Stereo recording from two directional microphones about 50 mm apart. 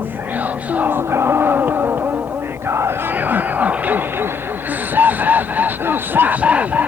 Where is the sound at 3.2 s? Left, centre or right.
Right.